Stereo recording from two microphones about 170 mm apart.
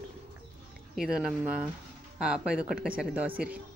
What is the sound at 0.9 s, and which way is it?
Speech, 5° right (ahead or behind).